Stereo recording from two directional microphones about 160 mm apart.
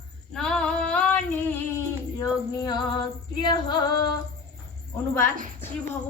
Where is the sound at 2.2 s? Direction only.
25° left (ahead or behind).